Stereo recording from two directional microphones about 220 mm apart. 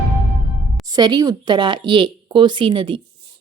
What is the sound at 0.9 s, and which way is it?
Speech, 20° right (ahead or behind).